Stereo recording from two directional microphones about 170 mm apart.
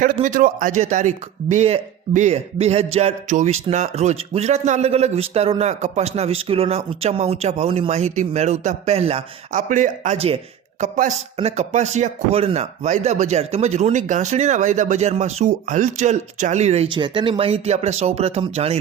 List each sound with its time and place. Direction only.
0.0 s a man's voice: 55° right (ahead or behind); by 10.8 s 35° right (ahead or behind)
10.9 s a man's voice: 50° right (ahead or behind)
16.9 s a man's voice: 30° right (ahead or behind)